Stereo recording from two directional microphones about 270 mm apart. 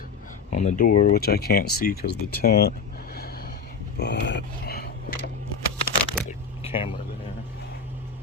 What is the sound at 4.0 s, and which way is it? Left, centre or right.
Speech, left.